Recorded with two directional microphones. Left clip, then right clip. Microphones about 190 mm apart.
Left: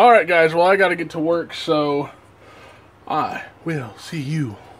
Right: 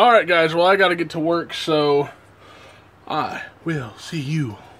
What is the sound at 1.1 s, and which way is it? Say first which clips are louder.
Speech: left 1 dB; 15° right (ahead or behind).